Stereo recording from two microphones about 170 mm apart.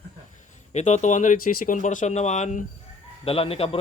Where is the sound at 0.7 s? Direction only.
45° left (ahead or behind).